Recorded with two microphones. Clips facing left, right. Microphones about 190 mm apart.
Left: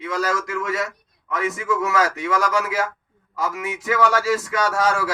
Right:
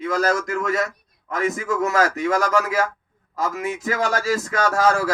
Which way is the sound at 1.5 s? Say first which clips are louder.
Right 1 dB; 45° right (ahead or behind).